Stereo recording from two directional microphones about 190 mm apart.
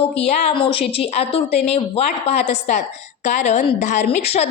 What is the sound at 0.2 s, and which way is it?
A woman's voice, 35° left (ahead or behind).